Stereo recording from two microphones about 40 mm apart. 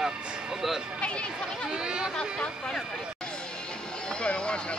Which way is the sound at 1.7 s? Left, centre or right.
Right.